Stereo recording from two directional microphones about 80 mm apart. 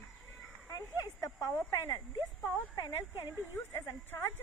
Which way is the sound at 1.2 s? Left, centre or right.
Left.